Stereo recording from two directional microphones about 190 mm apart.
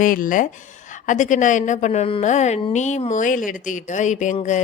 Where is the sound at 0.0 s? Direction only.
45° left (ahead or behind).